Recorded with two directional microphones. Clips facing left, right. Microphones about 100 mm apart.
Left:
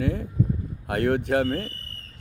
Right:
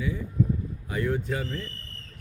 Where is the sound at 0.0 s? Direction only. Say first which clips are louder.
Left 2 dB; 65° left (ahead or behind).